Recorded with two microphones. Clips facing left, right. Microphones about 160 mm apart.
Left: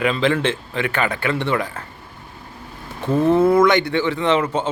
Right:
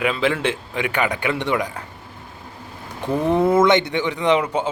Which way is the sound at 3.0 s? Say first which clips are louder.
Left 3 dB; 15° right (ahead or behind).